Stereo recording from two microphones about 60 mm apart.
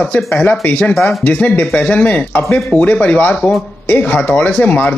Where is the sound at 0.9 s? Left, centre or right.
Centre.